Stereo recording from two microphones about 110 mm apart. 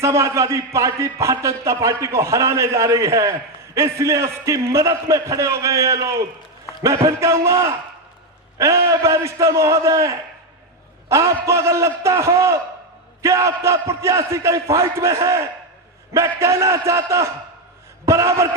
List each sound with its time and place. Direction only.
0.0 s a man's voice: 25° right (ahead or behind)